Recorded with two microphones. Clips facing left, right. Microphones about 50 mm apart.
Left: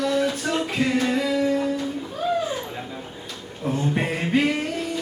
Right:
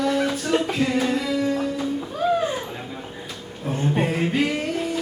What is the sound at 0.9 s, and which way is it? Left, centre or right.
Music, centre.